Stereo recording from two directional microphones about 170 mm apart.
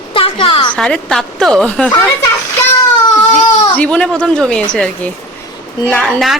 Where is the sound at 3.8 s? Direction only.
10° left (ahead or behind).